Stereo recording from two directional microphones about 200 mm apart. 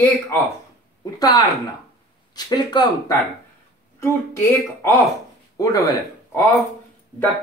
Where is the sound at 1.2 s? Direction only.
20° left (ahead or behind).